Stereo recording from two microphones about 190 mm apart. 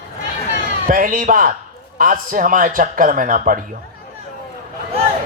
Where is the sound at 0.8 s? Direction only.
45° right (ahead or behind).